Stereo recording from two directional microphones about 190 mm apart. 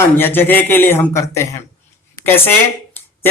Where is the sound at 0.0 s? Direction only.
10° left (ahead or behind).